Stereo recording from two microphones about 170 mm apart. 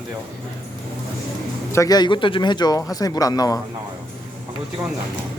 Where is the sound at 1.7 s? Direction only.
20° left (ahead or behind).